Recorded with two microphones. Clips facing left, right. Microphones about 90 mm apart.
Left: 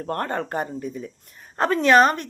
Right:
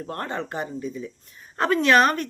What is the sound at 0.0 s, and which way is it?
Speech, 50° left (ahead or behind).